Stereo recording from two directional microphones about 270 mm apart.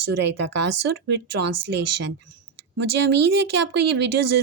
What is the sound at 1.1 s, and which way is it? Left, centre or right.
Speech, right.